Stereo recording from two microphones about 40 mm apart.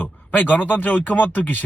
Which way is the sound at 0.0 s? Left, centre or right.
Left.